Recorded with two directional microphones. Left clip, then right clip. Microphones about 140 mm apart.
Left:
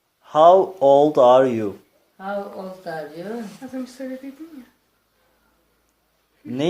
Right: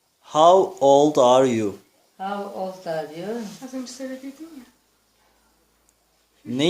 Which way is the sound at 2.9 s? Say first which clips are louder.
Left 1 dB; 15° right (ahead or behind).